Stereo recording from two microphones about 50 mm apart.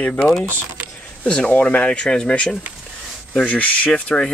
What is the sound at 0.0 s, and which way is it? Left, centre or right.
Speech, left.